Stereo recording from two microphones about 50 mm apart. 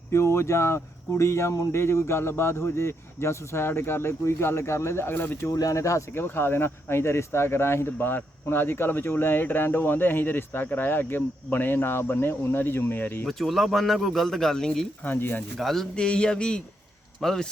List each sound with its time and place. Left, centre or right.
0.1 s speech: left
5.4 s speech: left
6.1 s speech: left
13.2 s a man's voice: centre
15.0 s speech: left
15.5 s a man's voice: centre
16.0 s speech: centre